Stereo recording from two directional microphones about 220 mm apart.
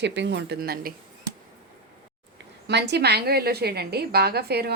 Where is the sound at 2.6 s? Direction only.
50° right (ahead or behind).